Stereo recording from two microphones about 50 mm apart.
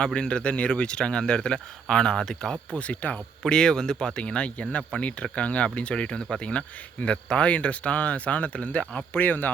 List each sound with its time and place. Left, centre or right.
0.0 s speech: centre
2.7 s speech: left
3.4 s speech: centre
9.1 s speech: left